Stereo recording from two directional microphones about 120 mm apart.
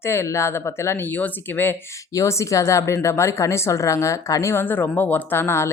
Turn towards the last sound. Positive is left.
turn(degrees=20)  # may be behind; listen again after turning